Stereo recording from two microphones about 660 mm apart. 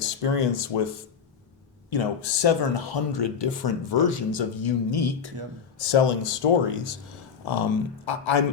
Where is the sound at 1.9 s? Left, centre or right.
Left.